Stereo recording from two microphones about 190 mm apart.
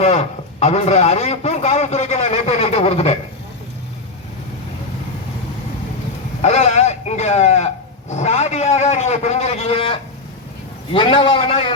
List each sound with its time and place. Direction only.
0.0 s a man's voice: 35° left (ahead or behind)
6.4 s a sound: 35° left (ahead or behind)
8.1 s a man's voice: 35° left (ahead or behind)